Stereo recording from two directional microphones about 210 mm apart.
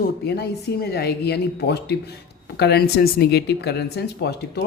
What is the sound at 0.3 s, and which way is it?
Speech, 50° left (ahead or behind).